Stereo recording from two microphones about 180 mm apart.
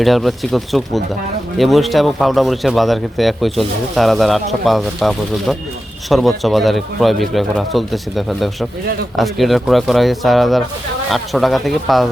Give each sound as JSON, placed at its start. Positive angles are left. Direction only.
{"t": 0.0, "sound": "speech", "side_deg": 0}